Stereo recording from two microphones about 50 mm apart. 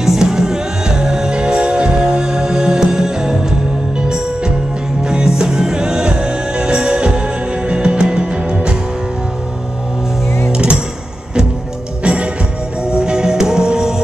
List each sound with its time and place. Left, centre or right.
0.0 s music: centre
5.0 s music: centre
10.5 s music: centre
12.0 s music: right